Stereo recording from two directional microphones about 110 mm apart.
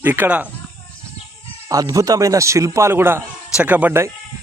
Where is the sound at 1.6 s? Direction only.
30° right (ahead or behind).